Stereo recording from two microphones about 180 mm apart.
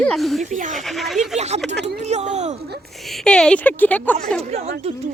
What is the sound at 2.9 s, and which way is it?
Speech, centre (ahead or behind).